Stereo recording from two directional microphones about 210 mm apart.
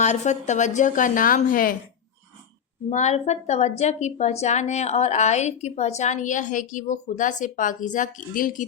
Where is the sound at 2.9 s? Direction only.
35° left (ahead or behind).